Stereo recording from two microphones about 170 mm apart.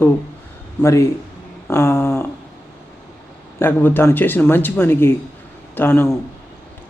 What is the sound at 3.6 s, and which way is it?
Speech, 10° left (ahead or behind).